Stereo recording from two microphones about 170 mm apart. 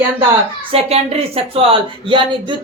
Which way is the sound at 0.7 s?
35° right (ahead or behind).